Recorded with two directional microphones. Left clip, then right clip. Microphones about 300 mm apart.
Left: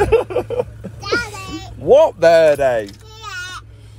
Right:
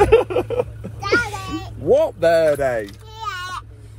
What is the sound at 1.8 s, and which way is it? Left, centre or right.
Speech, centre.